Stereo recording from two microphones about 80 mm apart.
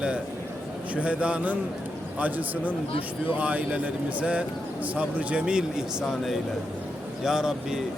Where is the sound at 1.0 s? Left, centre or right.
Centre.